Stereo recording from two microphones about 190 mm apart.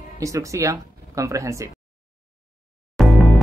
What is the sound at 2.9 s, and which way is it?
Music, centre (ahead or behind).